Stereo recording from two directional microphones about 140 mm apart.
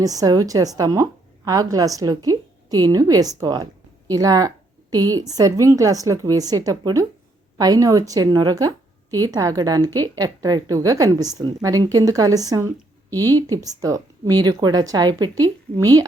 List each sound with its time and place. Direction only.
0.0 s speech: 25° right (ahead or behind)